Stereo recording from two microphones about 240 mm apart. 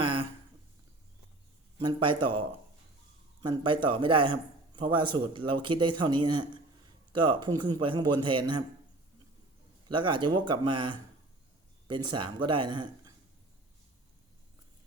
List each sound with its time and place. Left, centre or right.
0.0 s a sound: right
1.8 s a man's voice: centre
9.9 s a man's voice: centre